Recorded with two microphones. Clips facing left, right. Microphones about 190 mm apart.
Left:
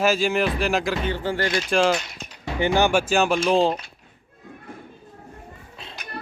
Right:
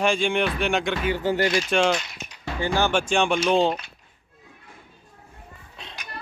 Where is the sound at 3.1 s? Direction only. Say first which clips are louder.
Left 1 dB; 5° left (ahead or behind).